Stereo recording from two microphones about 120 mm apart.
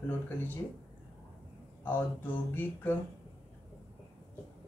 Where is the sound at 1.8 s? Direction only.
15° left (ahead or behind).